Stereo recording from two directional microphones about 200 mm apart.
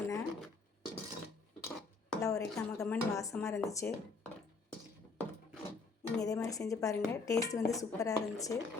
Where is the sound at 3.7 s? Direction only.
15° left (ahead or behind).